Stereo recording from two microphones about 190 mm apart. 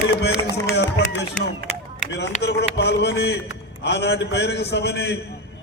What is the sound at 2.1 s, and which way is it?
A man's voice, 60° left (ahead or behind).